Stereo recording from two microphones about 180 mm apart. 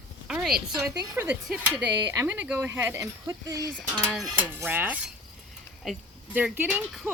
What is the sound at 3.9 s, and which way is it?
Speech, 5° left (ahead or behind).